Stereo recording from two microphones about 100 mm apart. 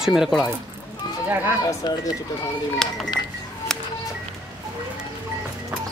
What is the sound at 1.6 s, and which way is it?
Speech, 40° left (ahead or behind).